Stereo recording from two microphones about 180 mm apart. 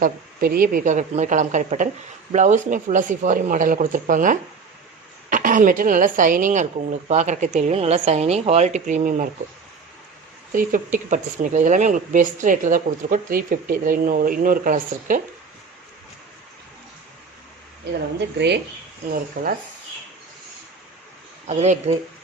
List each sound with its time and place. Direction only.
0.0 s a woman's voice: 55° right (ahead or behind)
10.5 s speech: 50° right (ahead or behind)
18.3 s speech: 70° right (ahead or behind)
19.1 s speech: 50° right (ahead or behind)
21.4 s a woman's voice: 40° right (ahead or behind)